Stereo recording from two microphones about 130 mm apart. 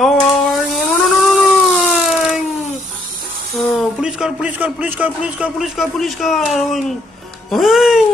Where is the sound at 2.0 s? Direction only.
Centre (ahead or behind).